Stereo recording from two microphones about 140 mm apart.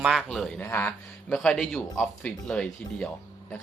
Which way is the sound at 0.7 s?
15° left (ahead or behind).